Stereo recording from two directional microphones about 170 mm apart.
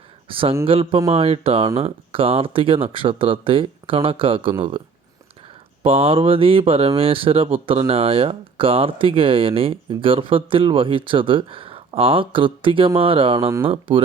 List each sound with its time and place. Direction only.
0.3 s speech: 30° right (ahead or behind)
5.8 s speech: 35° right (ahead or behind)